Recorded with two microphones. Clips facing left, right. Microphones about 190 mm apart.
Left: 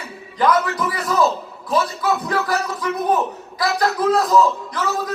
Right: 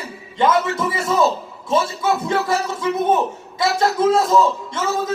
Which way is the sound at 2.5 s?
25° right (ahead or behind).